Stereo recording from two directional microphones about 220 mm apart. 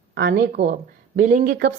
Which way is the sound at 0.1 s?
45° right (ahead or behind).